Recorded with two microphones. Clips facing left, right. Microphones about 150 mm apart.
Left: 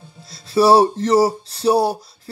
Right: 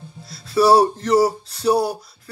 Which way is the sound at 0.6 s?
25° left (ahead or behind).